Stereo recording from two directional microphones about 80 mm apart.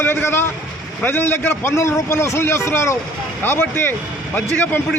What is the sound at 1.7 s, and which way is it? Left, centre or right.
A man's voice, left.